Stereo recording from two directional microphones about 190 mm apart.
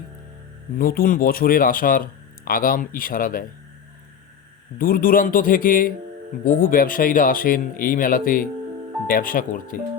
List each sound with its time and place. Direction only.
0.8 s speech: 50° left (ahead or behind)
4.8 s speech: 50° left (ahead or behind)